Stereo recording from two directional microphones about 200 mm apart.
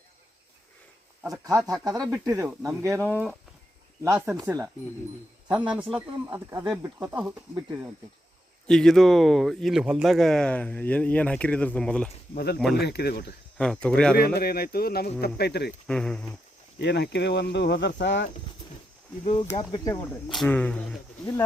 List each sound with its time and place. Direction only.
1.2 s speech: 15° right (ahead or behind)
2.0 s speech: 10° right (ahead or behind)
8.6 s speech: 5° left (ahead or behind)
12.7 s speech: 55° left (ahead or behind)
13.6 s speech: 5° left (ahead or behind)
14.2 s speech: 50° left (ahead or behind)
15.9 s speech: 5° left (ahead or behind)
16.7 s speech: 55° left (ahead or behind)
19.2 s speech: 25° left (ahead or behind)
19.7 s speech: 15° left (ahead or behind)
20.2 s speech: centre (ahead or behind)